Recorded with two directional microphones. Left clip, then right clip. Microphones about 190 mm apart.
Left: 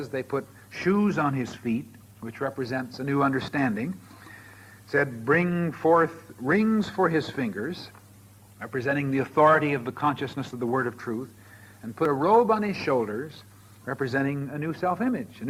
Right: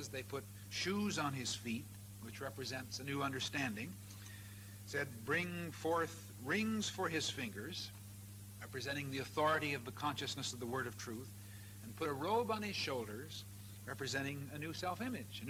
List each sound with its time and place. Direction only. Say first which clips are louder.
0.3 s a man's voice: left 16 dB; 30° right (ahead or behind)
4.9 s a man's voice: left 16 dB; 30° right (ahead or behind)
7.4 s a man's voice: left 13 dB; 40° right (ahead or behind)